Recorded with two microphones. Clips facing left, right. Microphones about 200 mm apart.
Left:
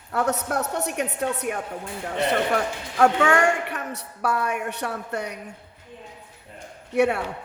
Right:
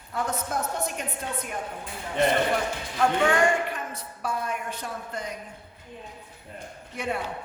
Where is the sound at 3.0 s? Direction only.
70° left (ahead or behind).